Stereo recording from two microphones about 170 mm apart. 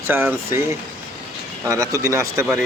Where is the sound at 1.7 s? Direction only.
20° right (ahead or behind).